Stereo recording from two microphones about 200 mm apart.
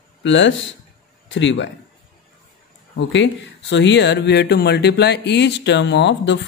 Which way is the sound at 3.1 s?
65° left (ahead or behind).